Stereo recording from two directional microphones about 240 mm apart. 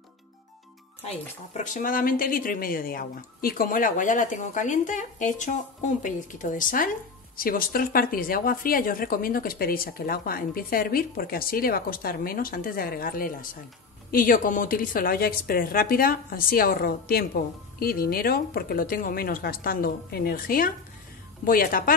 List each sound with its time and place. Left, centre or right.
1.0 s a woman's voice: left